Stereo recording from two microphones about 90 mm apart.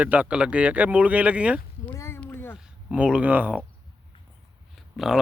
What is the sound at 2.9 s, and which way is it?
Speech, 15° right (ahead or behind).